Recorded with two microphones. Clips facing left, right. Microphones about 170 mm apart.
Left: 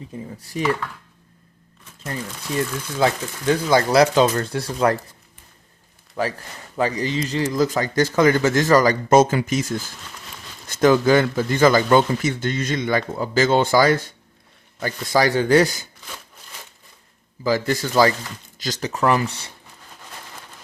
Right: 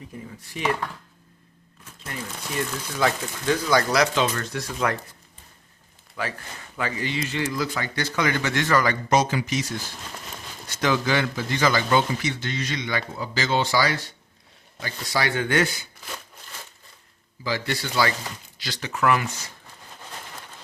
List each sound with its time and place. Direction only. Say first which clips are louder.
0.1 s speech: left 5 dB; 25° left (ahead or behind)
0.6 s speech: left 4 dB; 40° left (ahead or behind)
3.0 s speech: left 4 dB; 30° left (ahead or behind)
6.2 s speech: left 6 dB; 40° left (ahead or behind)
15.3 s speech: left 6 dB; 35° left (ahead or behind)
17.4 s speech: left 7 dB; 45° left (ahead or behind)